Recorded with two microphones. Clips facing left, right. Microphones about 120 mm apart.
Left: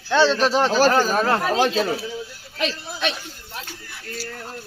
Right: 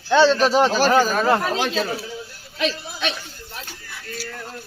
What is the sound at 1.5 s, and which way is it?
Speech, 40° left (ahead or behind).